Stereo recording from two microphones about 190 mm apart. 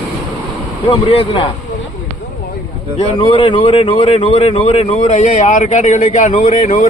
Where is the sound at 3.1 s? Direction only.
25° left (ahead or behind).